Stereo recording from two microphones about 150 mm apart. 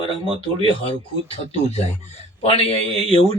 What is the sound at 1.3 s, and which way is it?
Speech, 45° left (ahead or behind).